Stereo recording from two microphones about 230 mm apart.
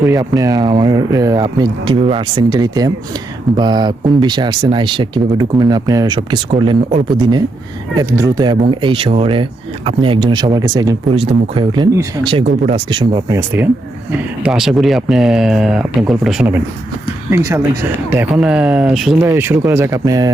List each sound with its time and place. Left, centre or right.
0.0 s speech: centre